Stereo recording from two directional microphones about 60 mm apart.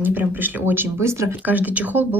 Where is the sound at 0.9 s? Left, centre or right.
Right.